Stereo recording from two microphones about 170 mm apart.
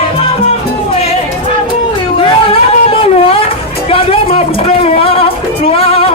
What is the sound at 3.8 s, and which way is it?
Music, 35° left (ahead or behind).